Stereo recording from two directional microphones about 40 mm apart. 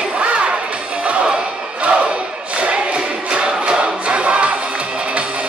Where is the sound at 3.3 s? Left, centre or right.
Right.